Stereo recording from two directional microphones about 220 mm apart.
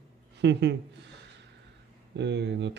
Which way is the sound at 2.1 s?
50° right (ahead or behind).